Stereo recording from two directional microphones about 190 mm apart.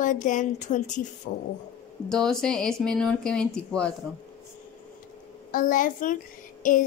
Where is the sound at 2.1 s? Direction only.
5° left (ahead or behind).